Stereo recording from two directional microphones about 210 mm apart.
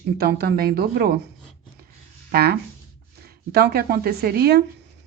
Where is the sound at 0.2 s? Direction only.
50° right (ahead or behind).